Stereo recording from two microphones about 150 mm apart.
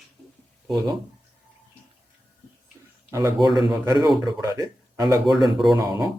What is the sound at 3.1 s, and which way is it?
Speech, 25° right (ahead or behind).